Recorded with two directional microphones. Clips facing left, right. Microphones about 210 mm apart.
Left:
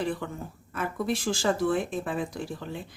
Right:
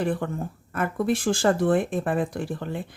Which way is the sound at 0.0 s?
50° right (ahead or behind).